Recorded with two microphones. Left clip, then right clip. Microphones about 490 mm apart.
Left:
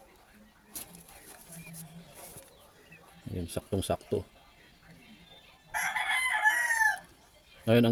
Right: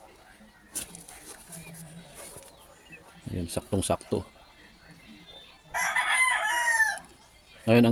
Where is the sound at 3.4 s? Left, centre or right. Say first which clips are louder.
Right 4 dB; left.